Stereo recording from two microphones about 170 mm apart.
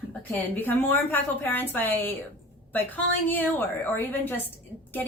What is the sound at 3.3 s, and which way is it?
A woman's voice, 10° left (ahead or behind).